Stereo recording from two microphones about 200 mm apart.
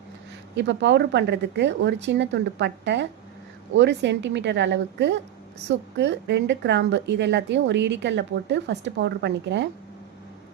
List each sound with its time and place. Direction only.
0.5 s a woman's voice: 60° right (ahead or behind)